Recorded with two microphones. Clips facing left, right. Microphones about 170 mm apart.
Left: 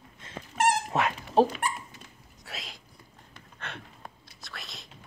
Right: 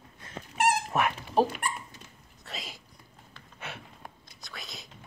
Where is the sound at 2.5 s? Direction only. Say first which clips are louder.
Right 1 dB; centre (ahead or behind).